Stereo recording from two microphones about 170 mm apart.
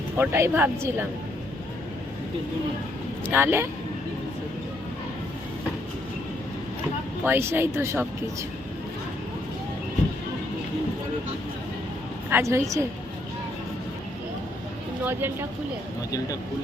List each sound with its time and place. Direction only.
0.2 s speech: 15° right (ahead or behind)
3.2 s speech: 10° right (ahead or behind)
7.3 s speech: 15° right (ahead or behind)
12.3 s speech: 15° right (ahead or behind)
15.0 s speech: 15° right (ahead or behind)